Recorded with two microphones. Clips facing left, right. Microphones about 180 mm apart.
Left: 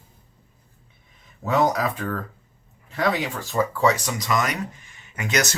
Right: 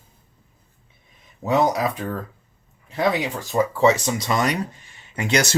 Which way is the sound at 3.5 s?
25° right (ahead or behind).